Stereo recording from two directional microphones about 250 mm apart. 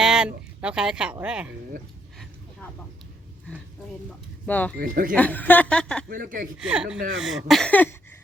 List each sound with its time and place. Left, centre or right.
0.0 s a sound: centre
1.2 s a woman's voice: centre
4.4 s speech: centre
4.8 s speech: right
5.1 s a woman's voice: centre
6.1 s speech: right
6.6 s a woman's voice: centre